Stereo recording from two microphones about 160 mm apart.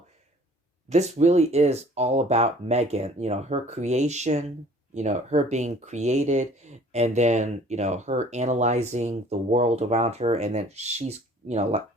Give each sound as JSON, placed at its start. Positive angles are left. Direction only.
{"t": 0.9, "sound": "speech", "side_deg": -45}